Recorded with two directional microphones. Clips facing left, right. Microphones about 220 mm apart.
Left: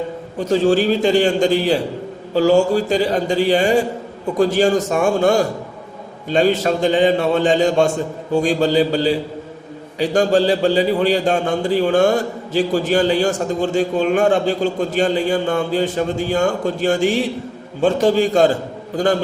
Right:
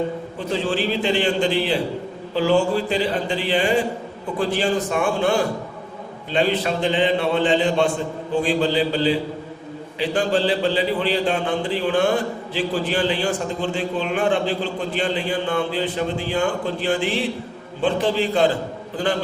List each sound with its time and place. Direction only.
0.3 s a man's voice: 45° left (ahead or behind)